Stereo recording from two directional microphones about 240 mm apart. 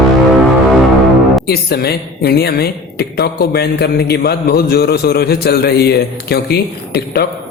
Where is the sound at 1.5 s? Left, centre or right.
Left.